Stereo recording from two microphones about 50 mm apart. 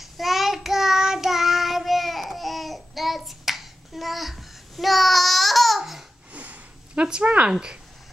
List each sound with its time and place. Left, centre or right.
0.0 s child singing: centre
6.3 s a sound: right
7.1 s speech: centre